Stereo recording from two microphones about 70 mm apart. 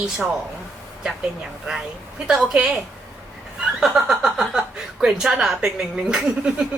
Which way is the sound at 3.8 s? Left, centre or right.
Centre.